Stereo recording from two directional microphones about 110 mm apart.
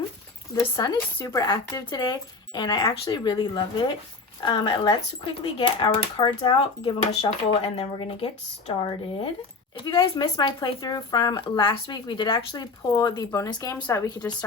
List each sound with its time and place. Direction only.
0.8 s speech: 35° left (ahead or behind)